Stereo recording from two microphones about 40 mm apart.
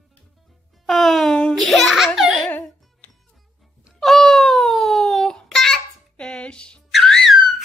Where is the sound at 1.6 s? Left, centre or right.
Centre.